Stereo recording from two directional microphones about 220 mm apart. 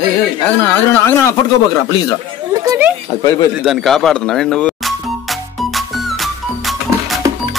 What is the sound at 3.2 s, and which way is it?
Speech, 15° left (ahead or behind).